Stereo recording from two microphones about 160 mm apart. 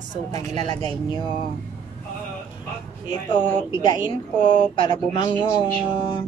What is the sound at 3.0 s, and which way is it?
A woman's voice, 35° left (ahead or behind).